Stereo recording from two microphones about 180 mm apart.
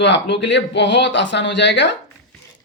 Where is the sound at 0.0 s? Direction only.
75° left (ahead or behind).